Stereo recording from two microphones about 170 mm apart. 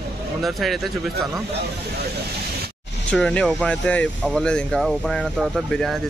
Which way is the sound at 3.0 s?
5° left (ahead or behind).